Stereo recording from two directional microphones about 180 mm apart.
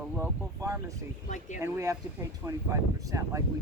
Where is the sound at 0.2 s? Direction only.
15° right (ahead or behind).